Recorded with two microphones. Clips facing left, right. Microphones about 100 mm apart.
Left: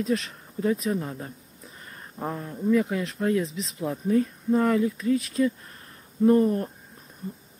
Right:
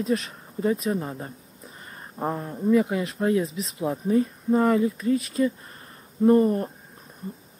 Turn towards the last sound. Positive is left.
turn(degrees=-5)  # may be behind; listen again after turning